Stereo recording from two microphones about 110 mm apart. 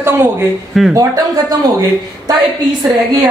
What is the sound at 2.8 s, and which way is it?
Speech, 35° right (ahead or behind).